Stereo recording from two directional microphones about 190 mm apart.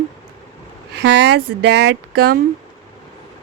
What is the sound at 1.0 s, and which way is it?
Speech, 65° right (ahead or behind).